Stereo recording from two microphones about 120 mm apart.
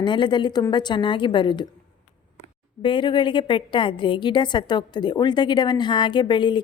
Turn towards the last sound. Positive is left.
turn(degrees=40)  # may be behind; listen again after turning